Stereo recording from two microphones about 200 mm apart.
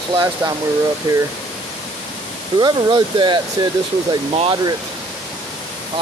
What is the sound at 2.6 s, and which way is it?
Speech, 20° right (ahead or behind).